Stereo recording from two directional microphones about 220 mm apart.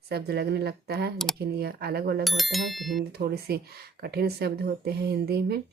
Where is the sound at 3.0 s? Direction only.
45° right (ahead or behind).